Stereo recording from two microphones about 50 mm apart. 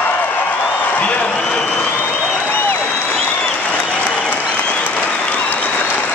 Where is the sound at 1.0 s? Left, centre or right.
Left.